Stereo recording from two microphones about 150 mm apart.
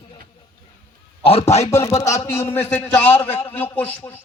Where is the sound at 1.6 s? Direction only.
20° left (ahead or behind).